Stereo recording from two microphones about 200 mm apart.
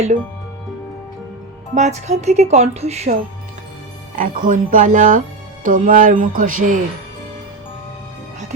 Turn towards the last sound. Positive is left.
turn(degrees=-45)  # may be behind; listen again after turning